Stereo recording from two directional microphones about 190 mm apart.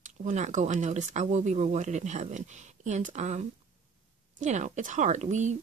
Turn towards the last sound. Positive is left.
turn(degrees=-40)  # may be behind; listen again after turning